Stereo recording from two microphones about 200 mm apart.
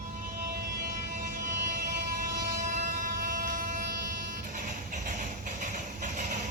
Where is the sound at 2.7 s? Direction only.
45° right (ahead or behind).